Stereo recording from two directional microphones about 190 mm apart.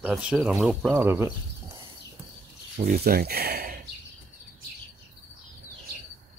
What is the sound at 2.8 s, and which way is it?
Speech, 50° right (ahead or behind).